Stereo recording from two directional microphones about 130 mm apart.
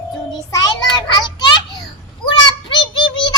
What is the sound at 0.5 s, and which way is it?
Child singing, 25° left (ahead or behind).